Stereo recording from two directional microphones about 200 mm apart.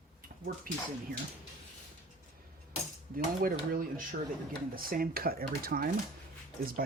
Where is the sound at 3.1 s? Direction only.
45° right (ahead or behind).